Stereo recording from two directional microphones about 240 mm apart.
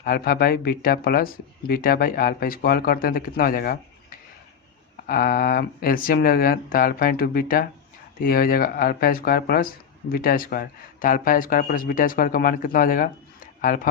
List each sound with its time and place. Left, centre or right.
0.0 s speech: left